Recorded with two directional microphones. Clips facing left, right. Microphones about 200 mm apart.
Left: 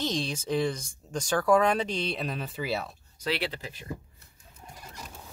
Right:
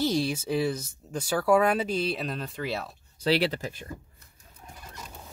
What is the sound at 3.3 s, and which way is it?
Speech, 45° right (ahead or behind).